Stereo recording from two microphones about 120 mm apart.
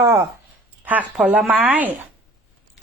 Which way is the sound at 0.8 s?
15° right (ahead or behind).